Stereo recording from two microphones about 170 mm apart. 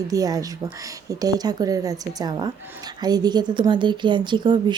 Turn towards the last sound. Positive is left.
turn(degrees=-25)  # may be behind; listen again after turning